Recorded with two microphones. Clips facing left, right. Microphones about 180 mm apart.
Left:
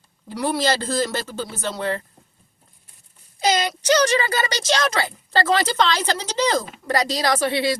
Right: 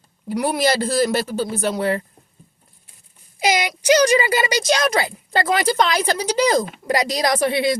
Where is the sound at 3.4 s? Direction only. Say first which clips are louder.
Right 1 dB; 10° right (ahead or behind).